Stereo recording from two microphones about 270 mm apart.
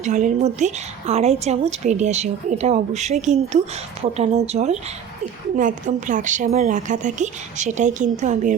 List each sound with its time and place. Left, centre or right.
0.0 s a woman's voice: right